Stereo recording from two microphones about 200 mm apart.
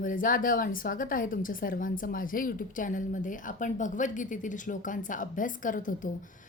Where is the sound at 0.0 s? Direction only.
40° left (ahead or behind).